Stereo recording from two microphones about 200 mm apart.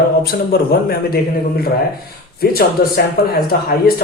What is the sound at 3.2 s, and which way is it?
Speech, 50° left (ahead or behind).